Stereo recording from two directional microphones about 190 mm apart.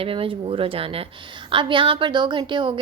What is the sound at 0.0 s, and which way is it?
A woman's voice, 30° right (ahead or behind).